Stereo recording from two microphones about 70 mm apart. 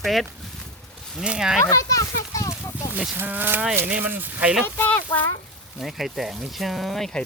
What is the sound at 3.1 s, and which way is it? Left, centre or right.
Speech, right.